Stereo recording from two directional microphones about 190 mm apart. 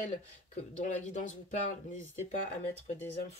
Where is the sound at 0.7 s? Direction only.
40° left (ahead or behind).